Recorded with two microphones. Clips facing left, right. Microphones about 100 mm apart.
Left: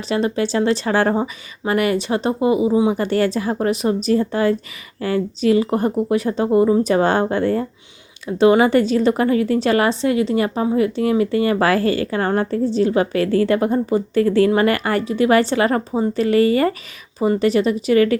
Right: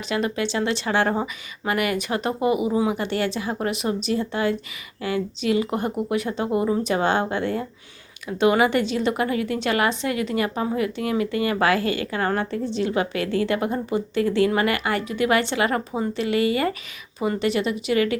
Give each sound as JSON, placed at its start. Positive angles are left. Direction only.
{"t": 0.1, "sound": "a woman's voice", "side_deg": 30}
{"t": 3.0, "sound": "a woman's voice", "side_deg": 40}